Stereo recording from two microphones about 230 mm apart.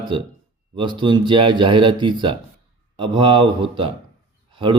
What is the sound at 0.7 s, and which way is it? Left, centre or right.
Speech, centre.